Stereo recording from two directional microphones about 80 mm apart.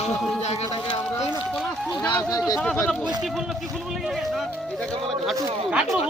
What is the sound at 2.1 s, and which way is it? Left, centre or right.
Speech, left.